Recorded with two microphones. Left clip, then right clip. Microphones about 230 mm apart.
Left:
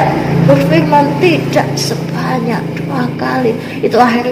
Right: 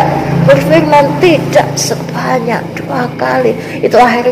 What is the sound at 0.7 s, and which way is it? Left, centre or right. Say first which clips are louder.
A woman's voice: right 3 dB; right.